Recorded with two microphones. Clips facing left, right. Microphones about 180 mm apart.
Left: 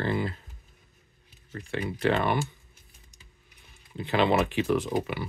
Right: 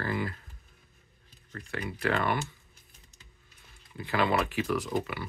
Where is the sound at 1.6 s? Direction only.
25° left (ahead or behind).